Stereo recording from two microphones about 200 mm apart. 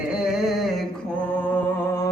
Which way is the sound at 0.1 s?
Centre (ahead or behind).